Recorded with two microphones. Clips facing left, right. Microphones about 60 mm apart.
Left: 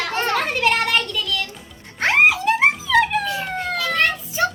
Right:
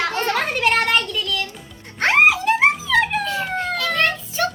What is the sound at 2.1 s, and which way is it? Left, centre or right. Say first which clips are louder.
Music: right 1 dB; centre.